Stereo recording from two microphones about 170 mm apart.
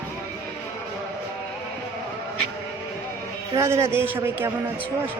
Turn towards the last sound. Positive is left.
turn(degrees=-15)  # may be behind; listen again after turning